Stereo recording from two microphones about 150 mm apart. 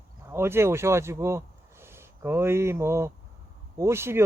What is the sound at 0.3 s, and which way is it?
Speech, 15° right (ahead or behind).